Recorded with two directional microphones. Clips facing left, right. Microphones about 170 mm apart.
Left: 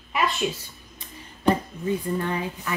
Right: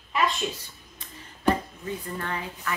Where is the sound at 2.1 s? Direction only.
15° left (ahead or behind).